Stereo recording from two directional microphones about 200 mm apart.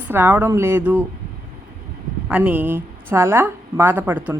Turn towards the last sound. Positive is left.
turn(degrees=-5)  # may be behind; listen again after turning